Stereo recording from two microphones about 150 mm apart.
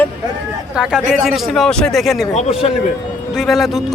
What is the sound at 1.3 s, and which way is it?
Speech, centre (ahead or behind).